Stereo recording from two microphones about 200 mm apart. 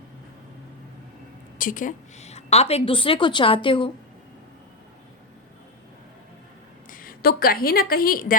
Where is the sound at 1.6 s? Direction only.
40° left (ahead or behind); by 3.9 s 25° left (ahead or behind).